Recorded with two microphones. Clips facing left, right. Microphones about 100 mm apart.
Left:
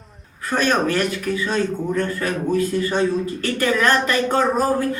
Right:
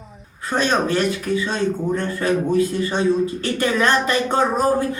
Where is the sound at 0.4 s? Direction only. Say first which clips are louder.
Even; 20° right (ahead or behind).